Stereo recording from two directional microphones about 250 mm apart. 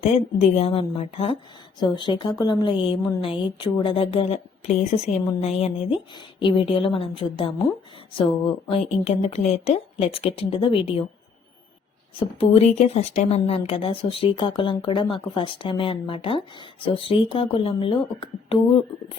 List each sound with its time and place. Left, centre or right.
0.0 s speech: left
12.2 s speech: left